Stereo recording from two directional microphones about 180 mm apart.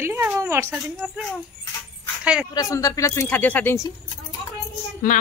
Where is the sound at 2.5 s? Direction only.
20° left (ahead or behind).